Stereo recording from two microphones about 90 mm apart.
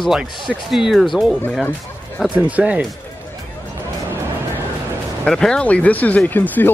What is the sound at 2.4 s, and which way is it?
Speech, 15° right (ahead or behind).